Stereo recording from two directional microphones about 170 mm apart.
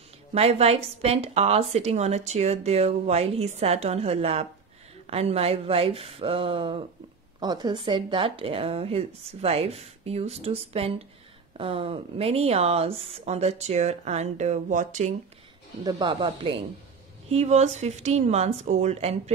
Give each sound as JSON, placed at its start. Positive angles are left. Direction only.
{"t": 0.3, "sound": "a woman's voice", "side_deg": -40}
{"t": 15.8, "sound": "a woman's voice", "side_deg": -25}